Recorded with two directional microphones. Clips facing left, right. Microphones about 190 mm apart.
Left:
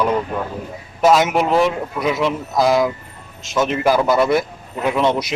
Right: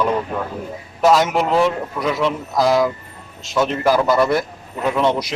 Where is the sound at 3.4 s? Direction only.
20° left (ahead or behind).